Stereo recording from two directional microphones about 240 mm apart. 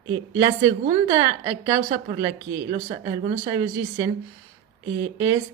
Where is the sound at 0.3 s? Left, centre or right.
Centre.